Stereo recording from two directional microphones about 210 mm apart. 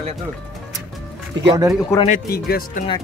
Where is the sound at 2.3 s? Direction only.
45° left (ahead or behind).